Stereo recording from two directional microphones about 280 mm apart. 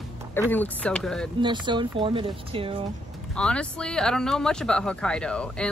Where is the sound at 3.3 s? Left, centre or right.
Centre.